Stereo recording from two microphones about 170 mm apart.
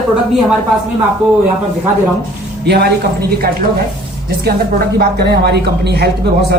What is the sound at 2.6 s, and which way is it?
Speech, 75° right (ahead or behind).